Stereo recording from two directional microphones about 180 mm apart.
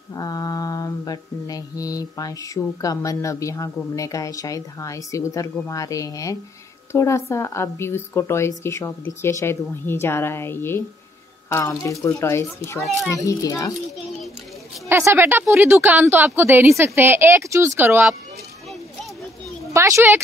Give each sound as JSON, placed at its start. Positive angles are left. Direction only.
{"t": 0.1, "sound": "mantra", "side_deg": 20}
{"t": 6.9, "sound": "a woman's voice", "side_deg": 15}
{"t": 13.1, "sound": "mantra", "side_deg": 20}
{"t": 14.9, "sound": "speech", "side_deg": -10}
{"t": 19.7, "sound": "speech", "side_deg": -15}